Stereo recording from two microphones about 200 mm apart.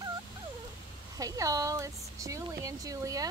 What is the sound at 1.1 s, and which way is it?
Speech, 15° right (ahead or behind).